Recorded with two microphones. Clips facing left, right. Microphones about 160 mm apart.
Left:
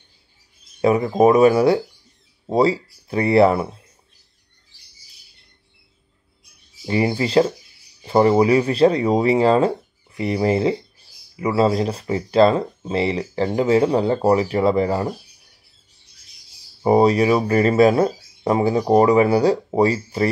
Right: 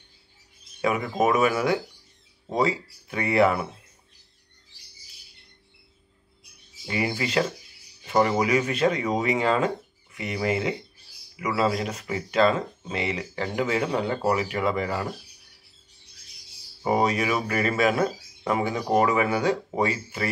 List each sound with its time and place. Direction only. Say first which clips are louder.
0.7 s speech: left 8 dB; 35° left (ahead or behind)
6.9 s speech: left 7 dB; 30° left (ahead or behind)
16.8 s speech: left 8 dB; 35° left (ahead or behind)